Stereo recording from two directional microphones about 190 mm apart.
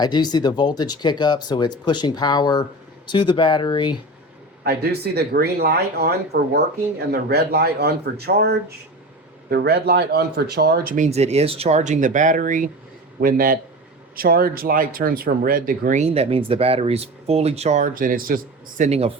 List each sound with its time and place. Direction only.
0.0 s speech: 20° left (ahead or behind)
4.6 s speech: 55° right (ahead or behind)
18.9 s speech: 30° right (ahead or behind)